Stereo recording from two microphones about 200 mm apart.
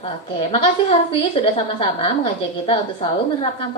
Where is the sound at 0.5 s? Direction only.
30° left (ahead or behind).